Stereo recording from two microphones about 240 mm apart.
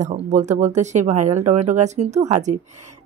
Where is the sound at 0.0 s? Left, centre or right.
Right.